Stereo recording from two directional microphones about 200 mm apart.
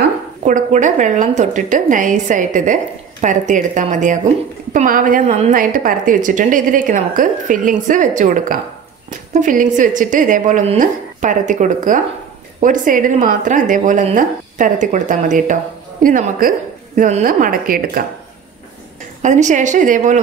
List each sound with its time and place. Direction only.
0.4 s a woman's voice: 40° right (ahead or behind)
19.2 s a woman's voice: 40° right (ahead or behind)